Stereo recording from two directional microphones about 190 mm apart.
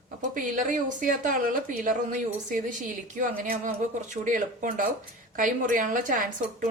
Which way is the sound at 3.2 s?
45° right (ahead or behind).